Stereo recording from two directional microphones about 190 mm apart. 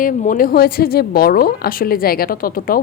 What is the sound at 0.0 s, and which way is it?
A woman's voice, 45° left (ahead or behind).